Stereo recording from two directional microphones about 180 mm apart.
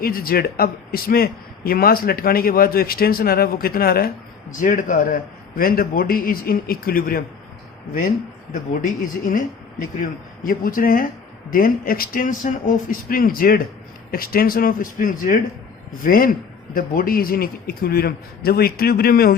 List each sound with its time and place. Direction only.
0.0 s a man's voice: 55° left (ahead or behind)
8.8 s a man's voice: 50° left (ahead or behind)